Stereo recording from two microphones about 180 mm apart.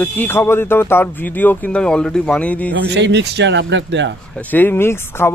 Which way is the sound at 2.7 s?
75° right (ahead or behind).